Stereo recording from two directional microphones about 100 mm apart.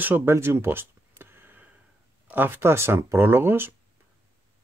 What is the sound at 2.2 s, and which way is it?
Speech, 20° right (ahead or behind).